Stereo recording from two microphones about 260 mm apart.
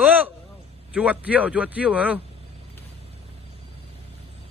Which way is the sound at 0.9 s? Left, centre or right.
Centre.